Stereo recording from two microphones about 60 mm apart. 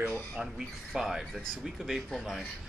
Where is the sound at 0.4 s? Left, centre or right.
Centre.